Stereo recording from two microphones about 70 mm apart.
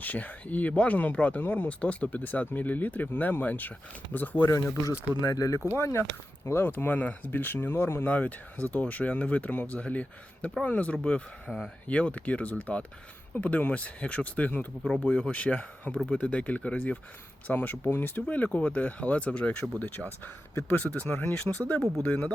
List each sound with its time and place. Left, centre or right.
0.0 s speech: left
4.7 s speech: left
8.0 s speech: left
11.4 s speech: centre
11.9 s speech: centre
14.8 s speech: centre
20.0 s speech: centre
20.7 s speech: centre
21.9 s speech: centre